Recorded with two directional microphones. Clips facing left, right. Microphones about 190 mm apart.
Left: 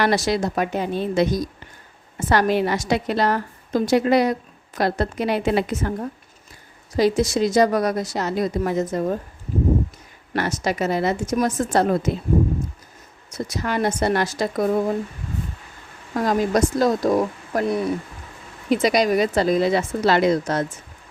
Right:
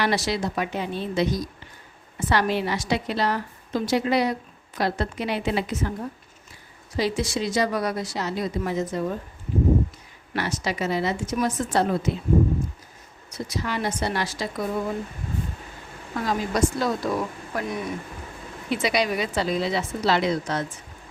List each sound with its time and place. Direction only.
0.0 s a woman's voice: 45° left (ahead or behind)
6.9 s a woman's voice: 45° left (ahead or behind)
10.3 s a woman's voice: 50° left (ahead or behind)
13.3 s a woman's voice: 45° left (ahead or behind)
16.1 s a woman's voice: 45° left (ahead or behind)